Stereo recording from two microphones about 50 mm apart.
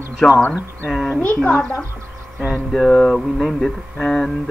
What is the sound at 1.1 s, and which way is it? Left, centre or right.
Speech, left.